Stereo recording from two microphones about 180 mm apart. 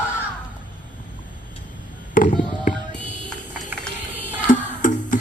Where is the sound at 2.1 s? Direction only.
45° left (ahead or behind).